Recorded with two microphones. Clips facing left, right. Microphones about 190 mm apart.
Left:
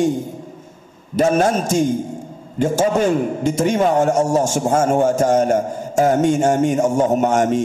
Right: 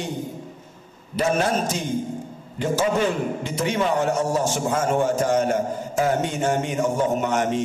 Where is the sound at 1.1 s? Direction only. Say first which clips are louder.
Left 6 dB; 45° left (ahead or behind).